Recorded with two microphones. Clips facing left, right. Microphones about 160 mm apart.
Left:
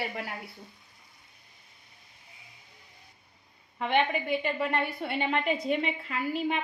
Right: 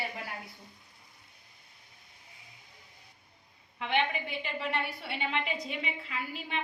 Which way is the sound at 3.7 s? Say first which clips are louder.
Left 4 dB; 45° left (ahead or behind).